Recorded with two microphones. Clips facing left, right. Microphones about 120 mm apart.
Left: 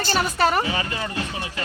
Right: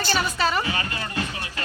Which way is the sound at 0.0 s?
45° left (ahead or behind).